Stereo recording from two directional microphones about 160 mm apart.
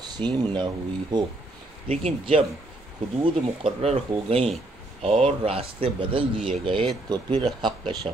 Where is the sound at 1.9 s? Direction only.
40° right (ahead or behind).